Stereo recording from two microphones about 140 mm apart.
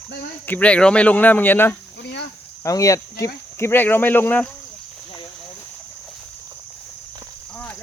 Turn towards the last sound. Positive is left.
turn(degrees=10)  # may be behind; listen again after turning